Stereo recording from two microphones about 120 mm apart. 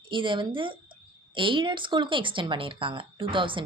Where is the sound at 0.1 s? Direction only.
45° right (ahead or behind).